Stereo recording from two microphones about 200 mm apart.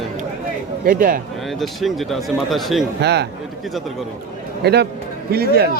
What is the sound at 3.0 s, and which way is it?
Speech, 55° right (ahead or behind).